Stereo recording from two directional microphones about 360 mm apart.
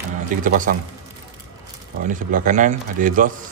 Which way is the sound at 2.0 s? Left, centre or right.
Right.